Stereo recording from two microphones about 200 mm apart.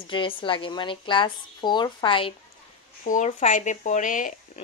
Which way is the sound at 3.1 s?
40° left (ahead or behind).